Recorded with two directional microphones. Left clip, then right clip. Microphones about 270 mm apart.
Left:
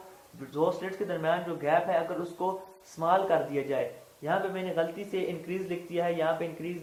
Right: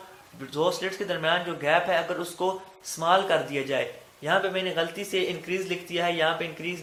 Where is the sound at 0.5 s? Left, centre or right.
Right.